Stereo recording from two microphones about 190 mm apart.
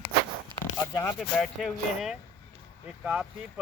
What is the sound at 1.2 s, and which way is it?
Speech, centre (ahead or behind).